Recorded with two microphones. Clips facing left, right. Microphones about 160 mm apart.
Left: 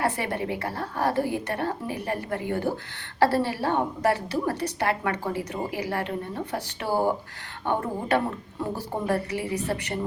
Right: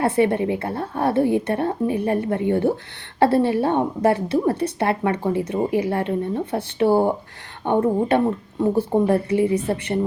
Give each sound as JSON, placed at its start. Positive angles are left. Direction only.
{"t": 0.0, "sound": "a woman's voice", "side_deg": -25}